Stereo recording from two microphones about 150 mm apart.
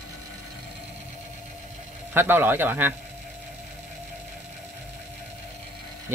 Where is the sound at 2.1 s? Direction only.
15° right (ahead or behind).